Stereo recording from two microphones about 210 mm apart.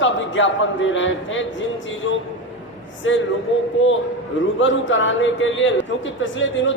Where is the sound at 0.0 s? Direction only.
65° left (ahead or behind).